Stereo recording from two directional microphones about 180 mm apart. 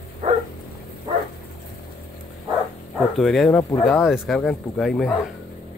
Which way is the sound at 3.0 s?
Centre (ahead or behind).